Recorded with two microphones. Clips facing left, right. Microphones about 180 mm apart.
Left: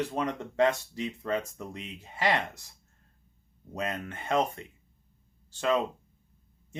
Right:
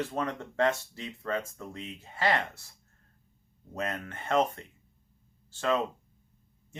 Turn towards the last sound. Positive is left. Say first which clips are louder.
# left 1 dB
turn(degrees=15)  # may be behind; listen again after turning